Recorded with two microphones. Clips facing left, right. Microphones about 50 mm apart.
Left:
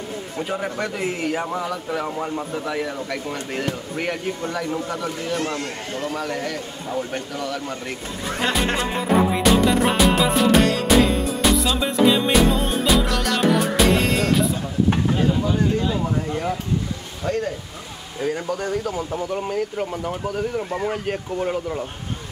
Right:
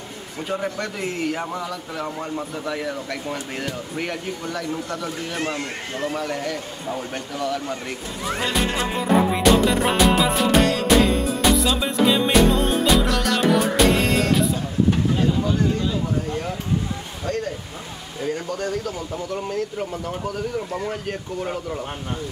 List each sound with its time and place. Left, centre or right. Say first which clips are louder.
0.4 s music: even; centre
0.7 s speech: left 2 dB; centre
2.6 s music: left 1 dB; centre
3.9 s speech: left 1 dB; centre
4.5 s speech: left 1 dB; centre
4.8 s speech: left 2 dB; centre
5.3 s speech: left 1 dB; centre
6.1 s music: even; centre
8.7 s music: even; centre
18.2 s speech: left 2 dB; centre